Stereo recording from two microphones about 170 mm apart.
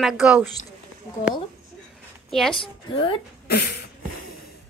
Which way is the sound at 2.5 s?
30° left (ahead or behind).